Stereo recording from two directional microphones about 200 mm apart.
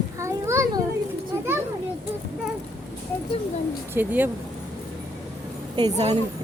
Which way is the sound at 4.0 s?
10° right (ahead or behind).